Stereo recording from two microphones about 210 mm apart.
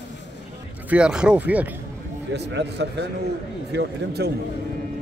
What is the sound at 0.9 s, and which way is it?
Speech, 5° right (ahead or behind).